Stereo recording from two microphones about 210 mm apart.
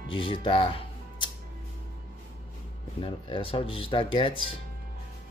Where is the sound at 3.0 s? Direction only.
25° left (ahead or behind).